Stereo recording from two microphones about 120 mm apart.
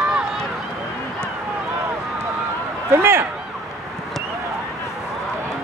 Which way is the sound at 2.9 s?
20° right (ahead or behind).